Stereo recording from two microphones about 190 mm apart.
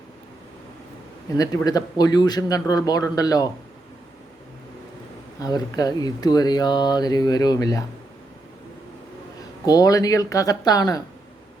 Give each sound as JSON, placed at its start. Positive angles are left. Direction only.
{"t": 1.4, "sound": "speech", "side_deg": 20}
{"t": 5.4, "sound": "speech", "side_deg": 20}
{"t": 9.6, "sound": "speech", "side_deg": 20}